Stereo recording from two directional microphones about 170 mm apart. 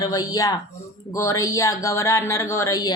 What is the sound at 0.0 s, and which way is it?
A woman's voice, 20° left (ahead or behind).